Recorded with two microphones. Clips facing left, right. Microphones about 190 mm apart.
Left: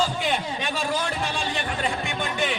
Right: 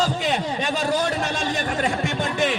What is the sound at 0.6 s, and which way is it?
Speech, 40° right (ahead or behind).